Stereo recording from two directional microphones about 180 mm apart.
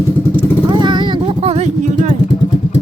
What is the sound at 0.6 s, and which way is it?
Vehicle, 25° right (ahead or behind).